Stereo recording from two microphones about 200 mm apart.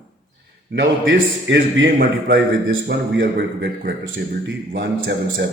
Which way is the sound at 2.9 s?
60° right (ahead or behind).